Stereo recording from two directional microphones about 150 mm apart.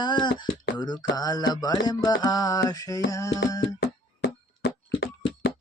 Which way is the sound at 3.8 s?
90° left.